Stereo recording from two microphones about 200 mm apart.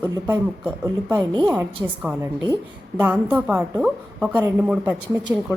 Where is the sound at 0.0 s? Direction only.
15° right (ahead or behind).